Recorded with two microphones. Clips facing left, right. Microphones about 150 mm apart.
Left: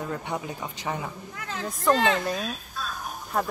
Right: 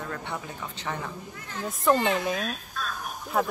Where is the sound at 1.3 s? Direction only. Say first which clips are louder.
Left 3 dB; 90° left.